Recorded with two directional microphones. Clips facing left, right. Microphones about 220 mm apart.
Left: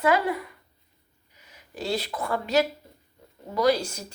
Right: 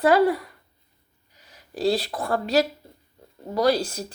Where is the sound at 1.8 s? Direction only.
35° right (ahead or behind).